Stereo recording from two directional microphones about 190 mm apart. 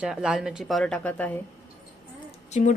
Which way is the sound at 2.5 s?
40° left (ahead or behind).